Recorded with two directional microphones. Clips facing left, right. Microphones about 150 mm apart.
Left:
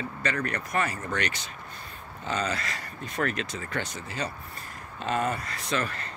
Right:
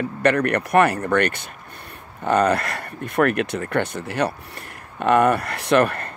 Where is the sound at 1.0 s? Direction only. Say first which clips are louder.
Right 11 dB; 55° right (ahead or behind).